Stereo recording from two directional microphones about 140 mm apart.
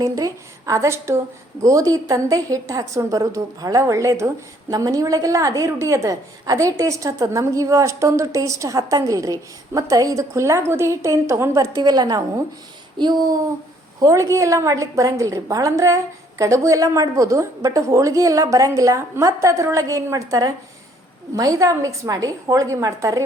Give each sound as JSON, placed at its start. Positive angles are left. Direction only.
{"t": 0.0, "sound": "a woman's voice", "side_deg": -25}
{"t": 13.0, "sound": "a sound", "side_deg": -35}
{"t": 14.0, "sound": "a woman's voice", "side_deg": -20}